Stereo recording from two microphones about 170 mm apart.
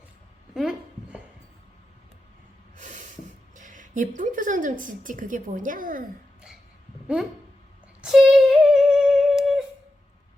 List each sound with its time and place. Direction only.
0.5 s a sound: 5° right (ahead or behind)
2.7 s snort: 45° right (ahead or behind)
3.5 s speech: 50° right (ahead or behind)
8.0 s humming: centre (ahead or behind)